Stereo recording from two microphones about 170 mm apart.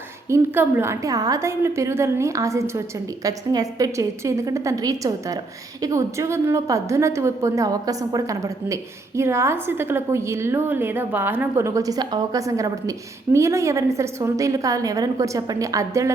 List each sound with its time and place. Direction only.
0.3 s a woman's voice: 15° right (ahead or behind)